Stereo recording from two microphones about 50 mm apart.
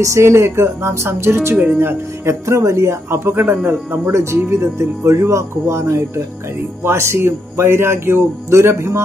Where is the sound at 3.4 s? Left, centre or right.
Right.